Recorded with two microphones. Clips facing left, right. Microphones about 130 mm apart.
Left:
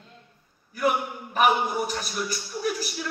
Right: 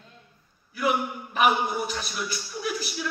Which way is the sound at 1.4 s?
45° left (ahead or behind).